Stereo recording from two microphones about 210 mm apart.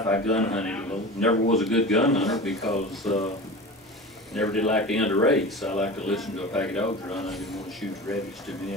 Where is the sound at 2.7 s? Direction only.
35° left (ahead or behind).